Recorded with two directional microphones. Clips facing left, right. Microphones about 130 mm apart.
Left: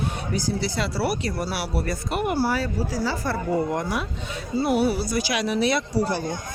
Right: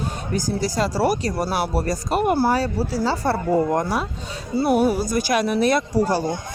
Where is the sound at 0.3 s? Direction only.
45° right (ahead or behind).